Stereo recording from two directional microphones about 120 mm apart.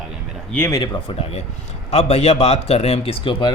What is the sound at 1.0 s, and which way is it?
A man's voice, 60° left (ahead or behind).